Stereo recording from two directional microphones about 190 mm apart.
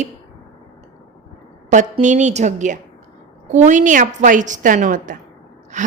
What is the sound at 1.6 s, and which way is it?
A woman's voice, 40° right (ahead or behind).